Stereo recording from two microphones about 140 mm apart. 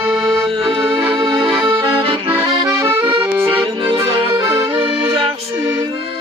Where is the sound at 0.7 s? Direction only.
35° right (ahead or behind).